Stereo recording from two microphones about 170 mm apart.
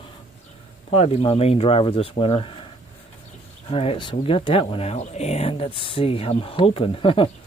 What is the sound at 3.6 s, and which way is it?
Speech, 35° left (ahead or behind).